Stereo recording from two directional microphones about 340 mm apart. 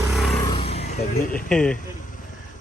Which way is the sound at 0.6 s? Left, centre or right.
Centre.